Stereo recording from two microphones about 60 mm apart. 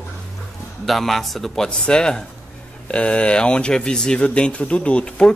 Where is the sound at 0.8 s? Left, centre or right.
Centre.